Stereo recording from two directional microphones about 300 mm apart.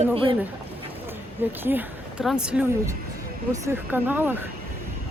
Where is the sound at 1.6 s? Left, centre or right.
Centre.